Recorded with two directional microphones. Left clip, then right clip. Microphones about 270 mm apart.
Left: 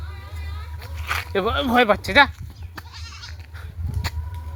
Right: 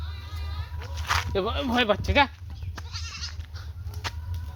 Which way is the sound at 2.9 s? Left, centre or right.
Right.